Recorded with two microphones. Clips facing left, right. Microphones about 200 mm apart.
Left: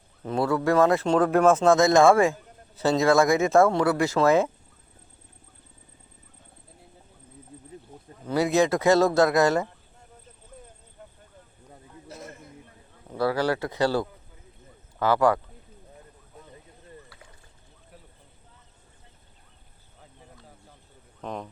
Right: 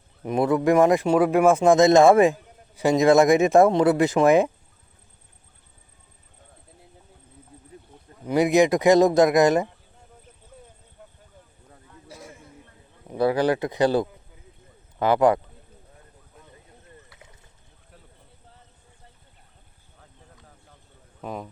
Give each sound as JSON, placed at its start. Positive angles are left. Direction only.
{"t": 0.2, "sound": "speech", "side_deg": -15}
{"t": 8.3, "sound": "speech", "side_deg": -15}
{"t": 12.0, "sound": "a sound", "side_deg": -10}
{"t": 13.1, "sound": "speech", "side_deg": -20}
{"t": 17.1, "sound": "boat", "side_deg": -20}
{"t": 21.2, "sound": "a man's voice", "side_deg": -5}